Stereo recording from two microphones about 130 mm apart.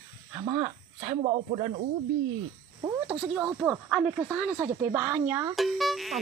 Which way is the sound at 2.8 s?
20° right (ahead or behind).